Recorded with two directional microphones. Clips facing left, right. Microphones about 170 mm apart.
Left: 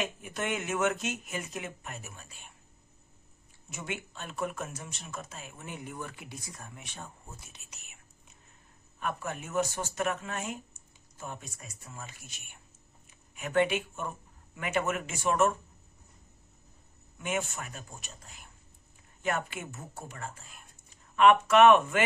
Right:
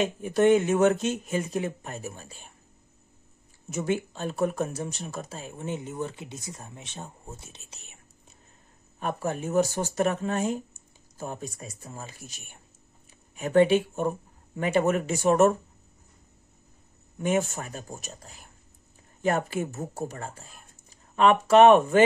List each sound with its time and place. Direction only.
0.0 s speech: 35° right (ahead or behind)
3.7 s speech: 35° right (ahead or behind)
17.2 s speech: 40° right (ahead or behind)